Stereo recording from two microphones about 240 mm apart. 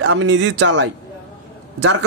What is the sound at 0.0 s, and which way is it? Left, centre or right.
Speech, right.